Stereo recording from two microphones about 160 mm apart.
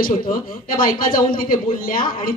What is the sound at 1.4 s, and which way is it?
Speech, 65° left (ahead or behind).